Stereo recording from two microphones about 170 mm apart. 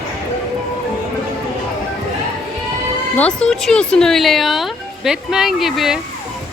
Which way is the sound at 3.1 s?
5° left (ahead or behind).